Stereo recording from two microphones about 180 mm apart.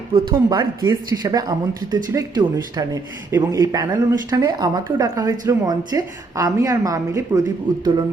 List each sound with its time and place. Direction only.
0.1 s a woman's voice: 25° right (ahead or behind)